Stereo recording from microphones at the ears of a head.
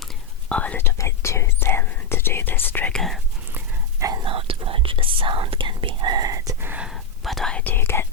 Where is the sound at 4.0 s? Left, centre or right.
Right.